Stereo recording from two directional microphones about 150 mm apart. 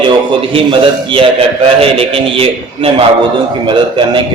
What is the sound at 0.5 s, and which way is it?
A man's voice, 35° right (ahead or behind).